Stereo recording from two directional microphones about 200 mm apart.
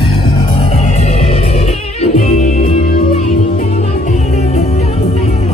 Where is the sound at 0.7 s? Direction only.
35° left (ahead or behind).